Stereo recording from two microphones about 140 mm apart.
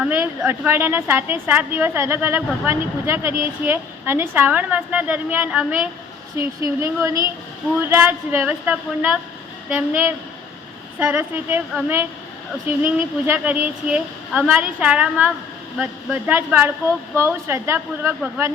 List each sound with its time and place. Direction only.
0.1 s a woman's voice: 15° right (ahead or behind)
6.3 s a woman's voice: 20° right (ahead or behind)
12.6 s a woman's voice: 15° right (ahead or behind)